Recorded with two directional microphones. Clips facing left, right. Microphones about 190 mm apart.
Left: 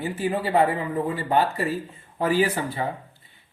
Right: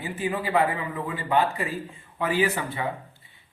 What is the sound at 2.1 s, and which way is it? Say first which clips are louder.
Speech: left 3 dB; 40° left (ahead or behind).